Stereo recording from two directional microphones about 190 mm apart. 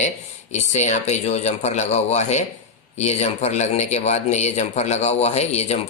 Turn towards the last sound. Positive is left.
turn(degrees=35)  # may be behind; listen again after turning